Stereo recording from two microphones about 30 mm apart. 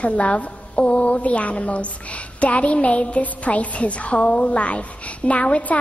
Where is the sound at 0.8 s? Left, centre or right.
Left.